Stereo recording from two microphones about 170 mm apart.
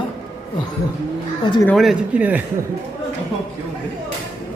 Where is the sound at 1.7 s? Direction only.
Centre (ahead or behind).